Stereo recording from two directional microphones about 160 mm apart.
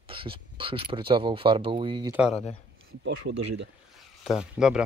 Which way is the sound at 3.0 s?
90° right.